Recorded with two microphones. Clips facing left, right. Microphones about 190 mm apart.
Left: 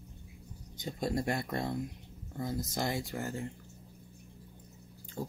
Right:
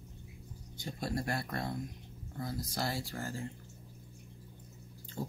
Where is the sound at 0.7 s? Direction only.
20° left (ahead or behind).